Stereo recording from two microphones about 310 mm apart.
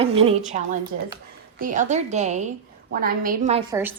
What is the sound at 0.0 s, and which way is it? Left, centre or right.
A woman's voice, centre.